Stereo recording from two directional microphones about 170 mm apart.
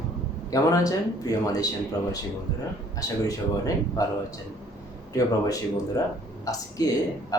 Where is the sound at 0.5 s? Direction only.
20° left (ahead or behind).